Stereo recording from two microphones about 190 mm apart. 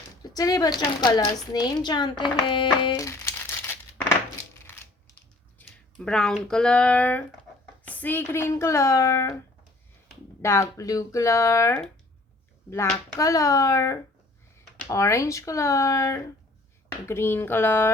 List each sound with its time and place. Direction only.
0.2 s speech: 20° left (ahead or behind)
5.5 s speech: 5° left (ahead or behind)
10.4 s speech: 15° left (ahead or behind)
13.1 s speech: 15° left (ahead or behind)